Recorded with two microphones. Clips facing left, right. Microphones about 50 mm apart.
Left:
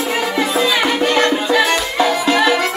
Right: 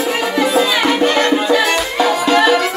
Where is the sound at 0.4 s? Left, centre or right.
Centre.